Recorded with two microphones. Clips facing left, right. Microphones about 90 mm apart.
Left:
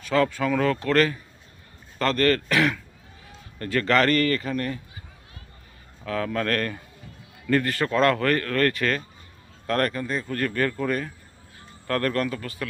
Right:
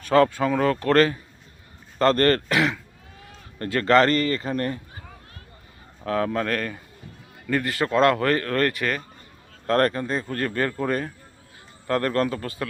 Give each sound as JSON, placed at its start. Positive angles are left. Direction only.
{"t": 0.0, "sound": "speech", "side_deg": -40}
{"t": 2.5, "sound": "a man's voice", "side_deg": -20}
{"t": 3.6, "sound": "a man's voice", "side_deg": -30}
{"t": 6.1, "sound": "a man's voice", "side_deg": -30}
{"t": 6.4, "sound": "a man's voice", "side_deg": -10}
{"t": 7.7, "sound": "a man's voice", "side_deg": -25}
{"t": 8.8, "sound": "speech", "side_deg": -15}
{"t": 9.6, "sound": "a man's voice", "side_deg": -30}